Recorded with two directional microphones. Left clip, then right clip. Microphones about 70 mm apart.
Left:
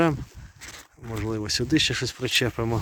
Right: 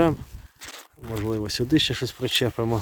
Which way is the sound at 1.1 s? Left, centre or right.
Right.